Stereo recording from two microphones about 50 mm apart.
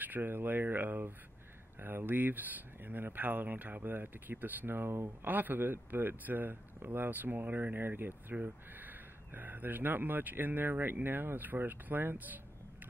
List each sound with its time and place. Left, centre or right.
0.0 s speech: right
5.2 s speech: right